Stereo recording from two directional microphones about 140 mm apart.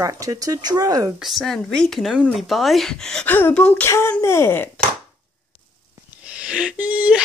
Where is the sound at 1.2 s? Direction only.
Centre (ahead or behind); by 4.7 s 15° left (ahead or behind).